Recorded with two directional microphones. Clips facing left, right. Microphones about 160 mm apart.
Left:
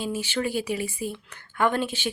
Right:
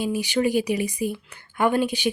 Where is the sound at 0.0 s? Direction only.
15° right (ahead or behind).